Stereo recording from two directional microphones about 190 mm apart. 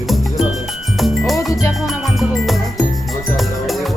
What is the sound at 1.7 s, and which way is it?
Music, centre (ahead or behind).